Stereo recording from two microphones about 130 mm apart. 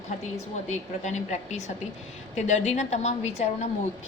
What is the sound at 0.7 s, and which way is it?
A woman's voice, 65° left (ahead or behind).